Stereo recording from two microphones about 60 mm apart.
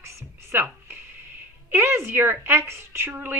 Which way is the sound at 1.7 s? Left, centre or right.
Right.